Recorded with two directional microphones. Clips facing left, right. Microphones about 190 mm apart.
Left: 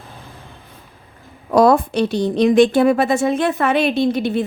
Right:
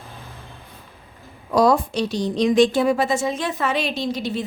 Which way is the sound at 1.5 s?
60° left (ahead or behind).